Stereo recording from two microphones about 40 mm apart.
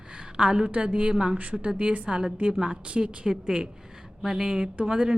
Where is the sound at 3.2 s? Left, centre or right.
Right.